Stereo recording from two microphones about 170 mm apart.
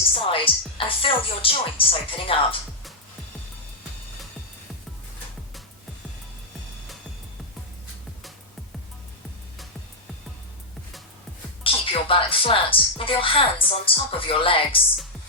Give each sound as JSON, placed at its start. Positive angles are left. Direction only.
{"t": 0.1, "sound": "speech", "side_deg": 30}
{"t": 11.6, "sound": "speech", "side_deg": 30}